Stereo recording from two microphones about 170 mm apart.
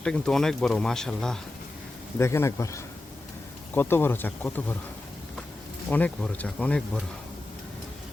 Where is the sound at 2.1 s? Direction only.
15° left (ahead or behind).